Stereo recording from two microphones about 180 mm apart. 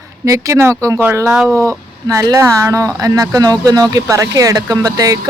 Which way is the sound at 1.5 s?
15° right (ahead or behind).